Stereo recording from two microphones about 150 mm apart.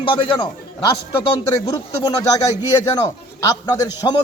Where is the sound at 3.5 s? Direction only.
25° left (ahead or behind).